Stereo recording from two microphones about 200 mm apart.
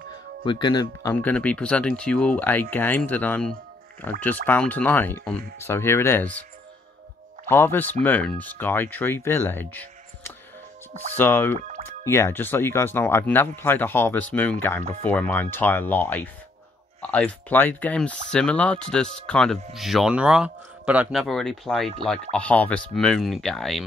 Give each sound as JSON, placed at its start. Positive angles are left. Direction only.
{"t": 0.5, "sound": "speech", "side_deg": 20}
{"t": 1.1, "sound": "speech", "side_deg": 5}
{"t": 7.4, "sound": "speech", "side_deg": 10}